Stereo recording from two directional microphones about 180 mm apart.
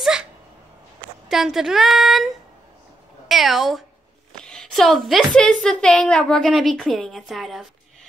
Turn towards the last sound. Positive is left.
turn(degrees=0)  # may be behind; listen again after turning